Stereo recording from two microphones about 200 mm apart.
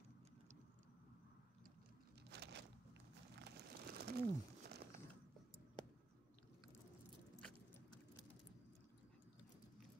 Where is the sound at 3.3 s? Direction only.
55° right (ahead or behind).